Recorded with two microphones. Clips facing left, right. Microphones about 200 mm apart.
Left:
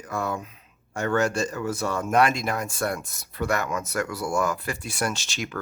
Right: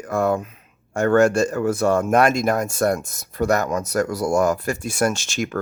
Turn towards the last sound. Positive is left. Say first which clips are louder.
# right 7 dB
turn(degrees=-50)  # may be behind; listen again after turning